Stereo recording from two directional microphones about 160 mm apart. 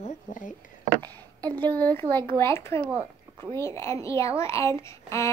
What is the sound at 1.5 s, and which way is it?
A woman's voice, 10° left (ahead or behind).